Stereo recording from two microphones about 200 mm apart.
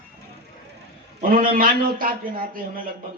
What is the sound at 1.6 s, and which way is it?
A woman's voice, 45° right (ahead or behind).